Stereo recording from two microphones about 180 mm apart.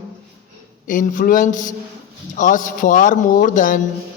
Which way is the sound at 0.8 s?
45° left (ahead or behind).